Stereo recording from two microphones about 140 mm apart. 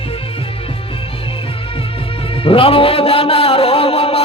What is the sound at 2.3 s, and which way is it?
Music, 40° left (ahead or behind).